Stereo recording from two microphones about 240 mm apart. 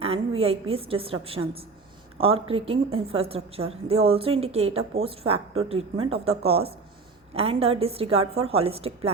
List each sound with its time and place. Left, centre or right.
0.0 s a woman's voice: right